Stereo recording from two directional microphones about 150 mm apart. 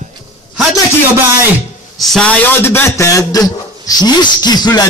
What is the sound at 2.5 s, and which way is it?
A man's voice, 15° left (ahead or behind).